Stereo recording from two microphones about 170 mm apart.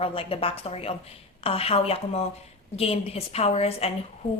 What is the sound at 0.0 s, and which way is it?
A woman's voice, 35° left (ahead or behind).